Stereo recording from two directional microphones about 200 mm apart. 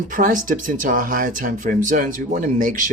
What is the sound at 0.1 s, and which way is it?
Speech, 40° right (ahead or behind).